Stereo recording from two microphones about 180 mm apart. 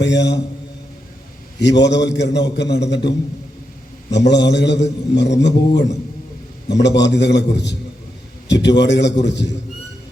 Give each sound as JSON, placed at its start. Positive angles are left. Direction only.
{"t": 0.0, "sound": "a man's voice", "side_deg": 75}
{"t": 1.5, "sound": "a man's voice", "side_deg": 75}
{"t": 6.8, "sound": "a man's voice", "side_deg": 75}